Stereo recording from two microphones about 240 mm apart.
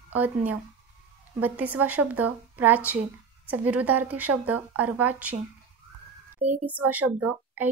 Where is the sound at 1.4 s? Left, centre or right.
Centre.